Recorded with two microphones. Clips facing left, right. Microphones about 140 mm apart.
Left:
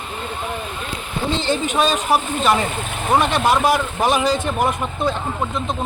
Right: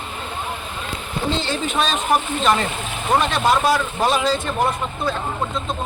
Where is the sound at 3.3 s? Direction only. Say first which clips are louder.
Left 1 dB; 15° left (ahead or behind).